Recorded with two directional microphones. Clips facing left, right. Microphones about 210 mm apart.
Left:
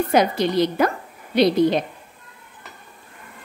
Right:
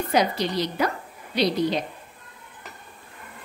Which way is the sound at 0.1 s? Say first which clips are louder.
Left 3 dB; 50° left (ahead or behind).